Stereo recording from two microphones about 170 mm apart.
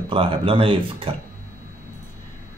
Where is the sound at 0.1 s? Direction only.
30° right (ahead or behind).